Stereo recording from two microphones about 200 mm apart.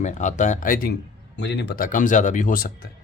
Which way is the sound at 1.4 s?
60° left (ahead or behind).